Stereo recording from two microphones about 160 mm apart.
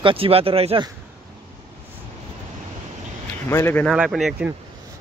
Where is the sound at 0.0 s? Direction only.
35° right (ahead or behind).